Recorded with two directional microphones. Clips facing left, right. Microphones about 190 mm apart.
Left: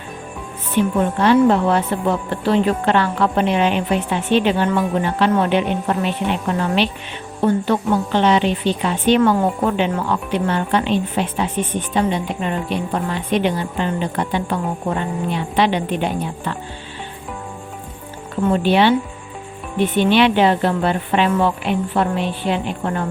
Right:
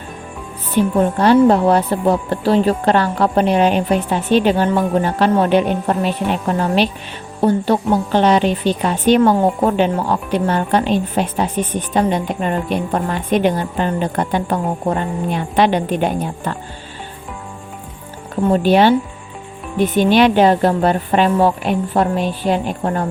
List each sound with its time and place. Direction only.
0.7 s a woman's voice: 40° right (ahead or behind)
18.5 s a woman's voice: 40° right (ahead or behind)